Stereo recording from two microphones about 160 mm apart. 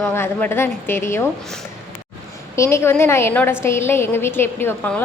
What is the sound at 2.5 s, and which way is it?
A woman's voice, 15° left (ahead or behind).